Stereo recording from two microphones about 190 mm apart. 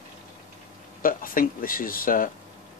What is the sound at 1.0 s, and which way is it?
Speech, 50° left (ahead or behind).